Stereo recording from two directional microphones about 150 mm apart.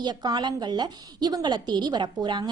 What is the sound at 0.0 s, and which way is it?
A woman's voice, 30° right (ahead or behind).